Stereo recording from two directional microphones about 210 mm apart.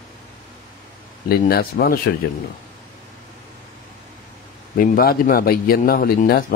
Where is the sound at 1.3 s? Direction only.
45° left (ahead or behind).